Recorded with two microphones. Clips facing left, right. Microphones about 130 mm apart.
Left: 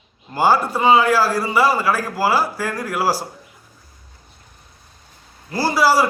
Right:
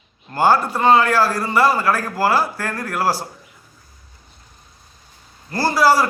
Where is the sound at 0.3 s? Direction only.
5° left (ahead or behind).